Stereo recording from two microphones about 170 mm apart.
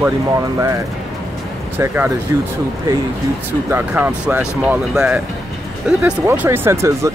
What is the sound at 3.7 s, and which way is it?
Speech, 10° right (ahead or behind).